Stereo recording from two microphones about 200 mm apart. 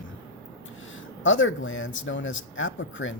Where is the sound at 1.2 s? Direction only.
75° left (ahead or behind).